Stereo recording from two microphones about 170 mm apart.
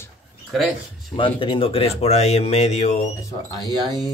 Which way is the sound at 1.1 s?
30° left (ahead or behind).